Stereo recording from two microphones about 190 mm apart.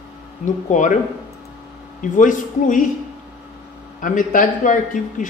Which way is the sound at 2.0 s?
45° left (ahead or behind).